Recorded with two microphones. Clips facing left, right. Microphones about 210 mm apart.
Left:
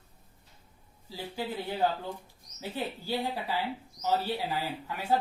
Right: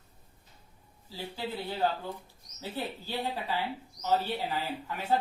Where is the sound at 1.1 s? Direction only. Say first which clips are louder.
Left 1 dB; 15° left (ahead or behind).